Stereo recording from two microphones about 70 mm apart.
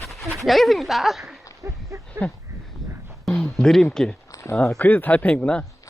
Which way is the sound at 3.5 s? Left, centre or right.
Centre.